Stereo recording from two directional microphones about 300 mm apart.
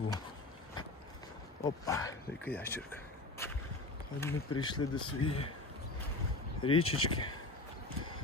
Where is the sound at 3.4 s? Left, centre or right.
Centre.